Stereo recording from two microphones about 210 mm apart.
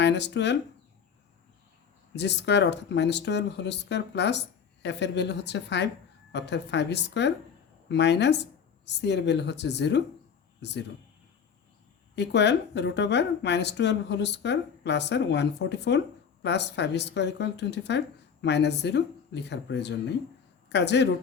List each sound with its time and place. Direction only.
0.0 s speech: 55° left (ahead or behind)
2.1 s speech: 55° left (ahead or behind)
12.1 s speech: 55° left (ahead or behind)